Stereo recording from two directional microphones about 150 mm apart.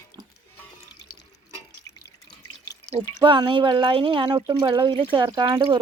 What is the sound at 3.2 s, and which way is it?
Speech, 30° right (ahead or behind).